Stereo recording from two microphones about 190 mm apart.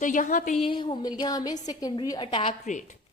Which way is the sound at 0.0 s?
40° left (ahead or behind).